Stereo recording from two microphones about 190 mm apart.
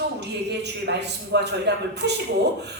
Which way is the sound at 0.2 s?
65° right (ahead or behind).